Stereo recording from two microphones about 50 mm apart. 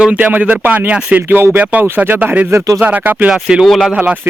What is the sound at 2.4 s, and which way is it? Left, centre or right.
Speech, right.